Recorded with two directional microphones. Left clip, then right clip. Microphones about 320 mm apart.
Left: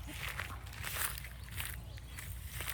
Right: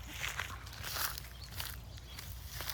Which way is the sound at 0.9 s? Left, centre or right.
Right.